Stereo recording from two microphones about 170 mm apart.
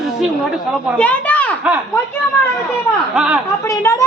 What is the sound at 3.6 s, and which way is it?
Speech, 15° left (ahead or behind).